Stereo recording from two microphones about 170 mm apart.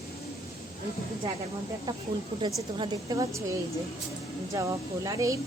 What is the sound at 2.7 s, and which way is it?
Speech, 25° right (ahead or behind).